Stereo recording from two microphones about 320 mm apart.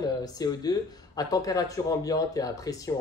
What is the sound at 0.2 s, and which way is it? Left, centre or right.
Speech, centre.